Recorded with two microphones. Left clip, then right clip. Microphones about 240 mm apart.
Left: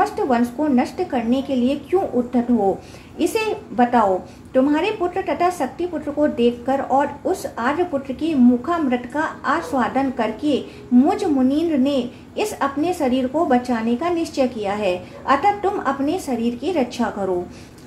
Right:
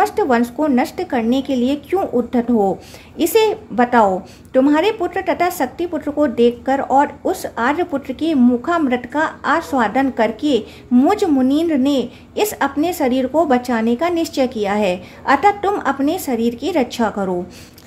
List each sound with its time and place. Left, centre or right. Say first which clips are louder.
0.0 s a woman's voice: right 3 dB; right